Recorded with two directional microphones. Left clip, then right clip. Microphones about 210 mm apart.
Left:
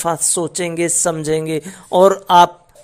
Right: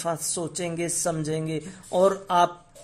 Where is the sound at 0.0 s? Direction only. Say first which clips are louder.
Left 10 dB; 25° left (ahead or behind).